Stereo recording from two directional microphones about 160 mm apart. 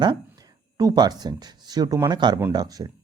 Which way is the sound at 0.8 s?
25° right (ahead or behind).